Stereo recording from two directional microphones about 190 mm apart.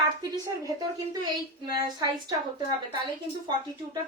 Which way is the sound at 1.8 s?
20° right (ahead or behind).